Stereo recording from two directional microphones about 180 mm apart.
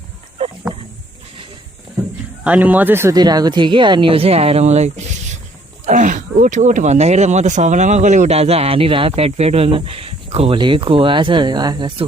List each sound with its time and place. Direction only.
2.4 s speech: 10° right (ahead or behind); by 12.0 s 25° right (ahead or behind)